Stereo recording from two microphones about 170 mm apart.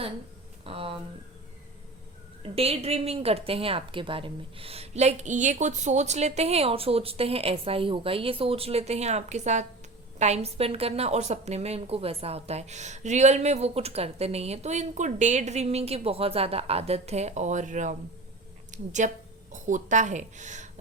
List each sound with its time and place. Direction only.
0.6 s speech: 35° right (ahead or behind)
2.4 s a woman's voice: 35° right (ahead or behind)